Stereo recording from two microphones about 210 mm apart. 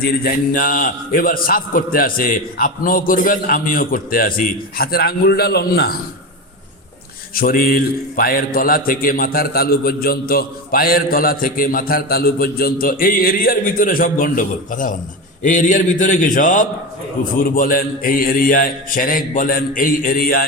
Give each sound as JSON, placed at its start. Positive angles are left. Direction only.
{"t": 0.0, "sound": "a man's voice", "side_deg": 45}
{"t": 7.3, "sound": "a man's voice", "side_deg": 45}